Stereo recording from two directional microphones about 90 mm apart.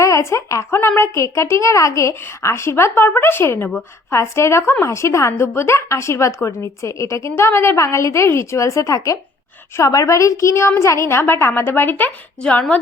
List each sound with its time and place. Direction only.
0.0 s a woman's voice: 35° left (ahead or behind); by 12.8 s 15° left (ahead or behind)